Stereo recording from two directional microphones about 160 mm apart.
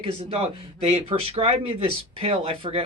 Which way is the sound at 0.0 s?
40° right (ahead or behind).